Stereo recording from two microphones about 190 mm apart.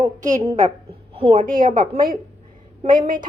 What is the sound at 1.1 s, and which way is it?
Speech, 30° right (ahead or behind).